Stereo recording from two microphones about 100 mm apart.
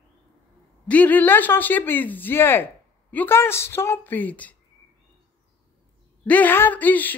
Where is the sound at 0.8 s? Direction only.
15° left (ahead or behind).